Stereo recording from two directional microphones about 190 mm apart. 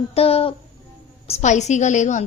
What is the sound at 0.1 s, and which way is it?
A woman's voice, 30° left (ahead or behind).